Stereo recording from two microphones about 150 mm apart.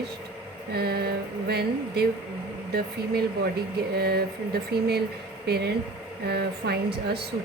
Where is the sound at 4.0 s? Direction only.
90° right.